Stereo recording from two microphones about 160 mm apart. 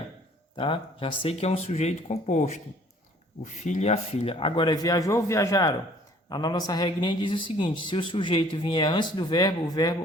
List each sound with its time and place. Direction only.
0.5 s speech: 35° left (ahead or behind)